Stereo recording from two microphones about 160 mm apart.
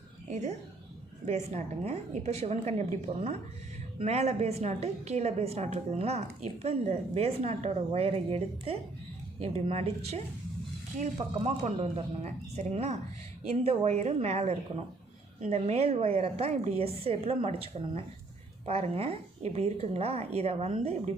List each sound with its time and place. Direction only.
0.3 s a woman's voice: 45° right (ahead or behind)